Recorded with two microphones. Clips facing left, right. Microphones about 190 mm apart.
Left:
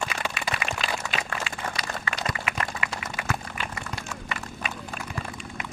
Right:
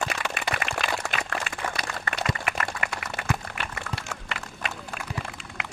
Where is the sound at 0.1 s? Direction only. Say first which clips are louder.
Right 1 dB; 50° right (ahead or behind).